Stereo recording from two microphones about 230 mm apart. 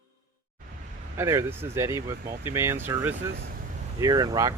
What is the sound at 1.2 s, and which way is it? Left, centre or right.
Speech, centre.